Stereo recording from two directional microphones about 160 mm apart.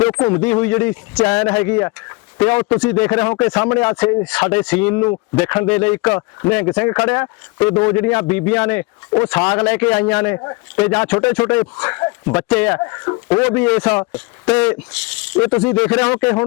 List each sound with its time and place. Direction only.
0.0 s speech: 10° left (ahead or behind)
10.3 s speech: 20° left (ahead or behind)
10.8 s speech: 10° left (ahead or behind)
12.8 s speech: 20° left (ahead or behind)
13.4 s speech: 10° left (ahead or behind)